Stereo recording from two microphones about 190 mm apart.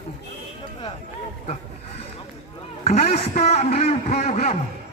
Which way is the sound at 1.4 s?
35° left (ahead or behind).